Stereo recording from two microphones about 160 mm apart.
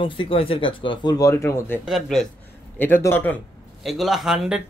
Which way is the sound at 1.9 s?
Centre (ahead or behind).